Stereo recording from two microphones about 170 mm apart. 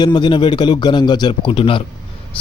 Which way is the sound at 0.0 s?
25° left (ahead or behind).